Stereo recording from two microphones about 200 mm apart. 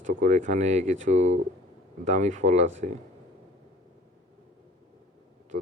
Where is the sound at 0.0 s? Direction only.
40° right (ahead or behind).